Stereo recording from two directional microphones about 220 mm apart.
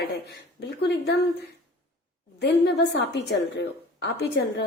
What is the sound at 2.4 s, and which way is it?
A woman's voice, 50° left (ahead or behind).